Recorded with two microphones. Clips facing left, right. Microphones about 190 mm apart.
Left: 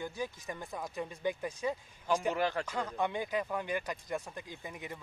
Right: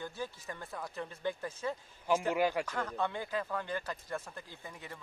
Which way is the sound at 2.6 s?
10° left (ahead or behind).